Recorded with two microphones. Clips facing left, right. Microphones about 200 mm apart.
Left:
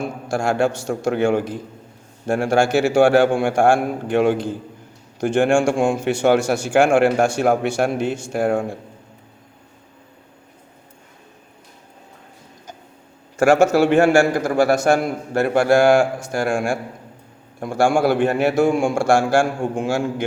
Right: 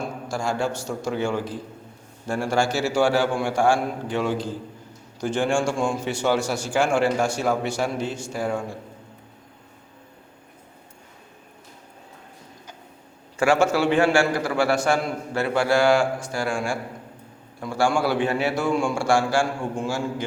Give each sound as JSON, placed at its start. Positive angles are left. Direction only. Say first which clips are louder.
{"t": 0.3, "sound": "a man's voice", "louder": "left 7 dB", "side_deg": 65}
{"t": 13.3, "sound": "a man's voice", "louder": "left 5 dB", "side_deg": 45}
{"t": 19.7, "sound": "a man's voice", "louder": "left 5 dB", "side_deg": 75}